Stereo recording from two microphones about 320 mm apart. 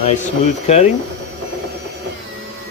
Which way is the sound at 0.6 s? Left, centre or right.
Centre.